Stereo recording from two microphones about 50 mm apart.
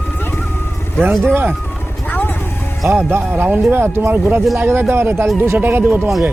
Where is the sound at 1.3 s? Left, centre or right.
Right.